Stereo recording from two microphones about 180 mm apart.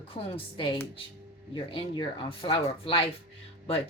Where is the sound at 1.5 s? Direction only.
25° left (ahead or behind).